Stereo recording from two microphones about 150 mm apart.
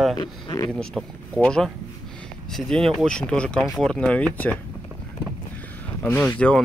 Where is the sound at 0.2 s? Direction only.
30° left (ahead or behind).